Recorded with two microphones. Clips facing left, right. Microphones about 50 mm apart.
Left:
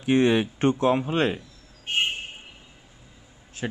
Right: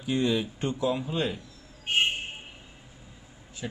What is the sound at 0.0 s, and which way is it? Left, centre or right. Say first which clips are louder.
Speech: left 6 dB; left.